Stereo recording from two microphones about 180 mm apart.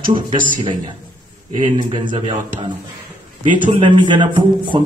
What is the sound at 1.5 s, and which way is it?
Speech, 25° right (ahead or behind).